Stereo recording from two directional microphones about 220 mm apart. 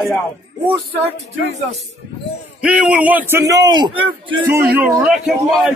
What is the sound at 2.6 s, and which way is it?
A man's voice, 5° right (ahead or behind).